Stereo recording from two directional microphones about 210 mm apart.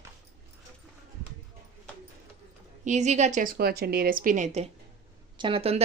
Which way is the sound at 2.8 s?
35° right (ahead or behind).